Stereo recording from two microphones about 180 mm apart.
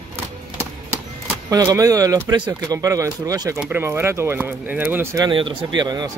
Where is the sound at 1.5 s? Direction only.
20° right (ahead or behind).